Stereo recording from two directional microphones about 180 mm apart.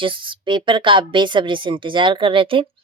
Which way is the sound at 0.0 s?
30° right (ahead or behind).